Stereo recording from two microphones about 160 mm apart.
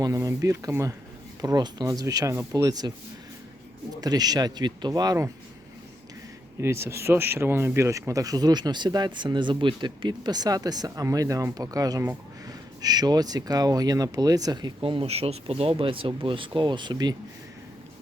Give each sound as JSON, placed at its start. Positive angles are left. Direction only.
{"t": 0.0, "sound": "speech", "side_deg": -20}
{"t": 4.0, "sound": "speech", "side_deg": -25}
{"t": 6.6, "sound": "speech", "side_deg": -15}